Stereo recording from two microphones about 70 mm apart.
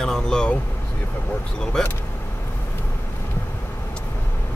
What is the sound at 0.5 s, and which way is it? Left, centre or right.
Vehicle, left.